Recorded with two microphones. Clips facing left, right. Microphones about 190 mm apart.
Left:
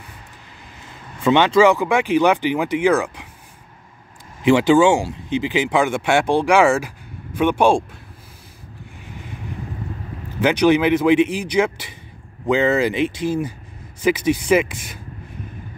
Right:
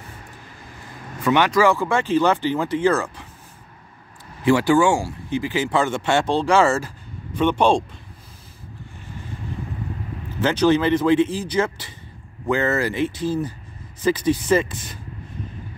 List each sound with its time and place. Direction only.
1.2 s speech: 25° left (ahead or behind)
4.4 s speech: 20° left (ahead or behind)
10.4 s speech: 15° left (ahead or behind)